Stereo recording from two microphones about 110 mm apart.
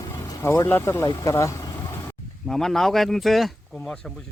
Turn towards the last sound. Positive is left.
turn(degrees=0)  # may be behind; listen again after turning